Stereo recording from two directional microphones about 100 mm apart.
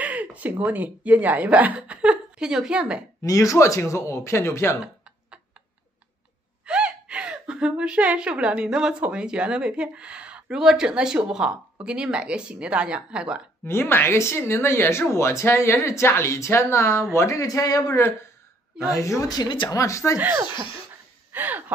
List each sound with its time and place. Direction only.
0.0 s speech: 15° right (ahead or behind)
3.3 s speech: 30° left (ahead or behind)
6.6 s speech: 10° right (ahead or behind)
13.7 s speech: 20° left (ahead or behind)
20.2 s speech: 20° right (ahead or behind)
21.3 s a sound: 15° right (ahead or behind)